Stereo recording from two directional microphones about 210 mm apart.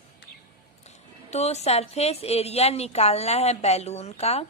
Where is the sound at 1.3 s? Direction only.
30° left (ahead or behind).